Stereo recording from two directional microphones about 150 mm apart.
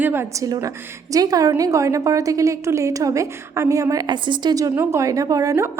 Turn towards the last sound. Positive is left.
turn(degrees=-20)  # may be behind; listen again after turning